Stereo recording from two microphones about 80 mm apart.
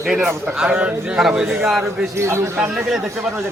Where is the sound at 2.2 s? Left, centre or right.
Right.